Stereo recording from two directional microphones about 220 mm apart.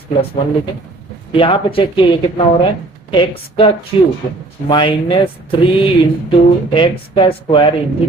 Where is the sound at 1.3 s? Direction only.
25° left (ahead or behind).